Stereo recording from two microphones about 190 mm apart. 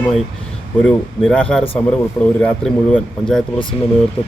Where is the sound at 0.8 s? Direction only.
5° left (ahead or behind).